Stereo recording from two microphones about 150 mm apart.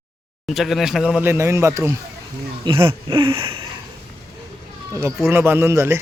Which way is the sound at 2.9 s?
35° right (ahead or behind).